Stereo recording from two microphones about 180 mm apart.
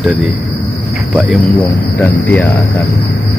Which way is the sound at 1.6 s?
15° left (ahead or behind).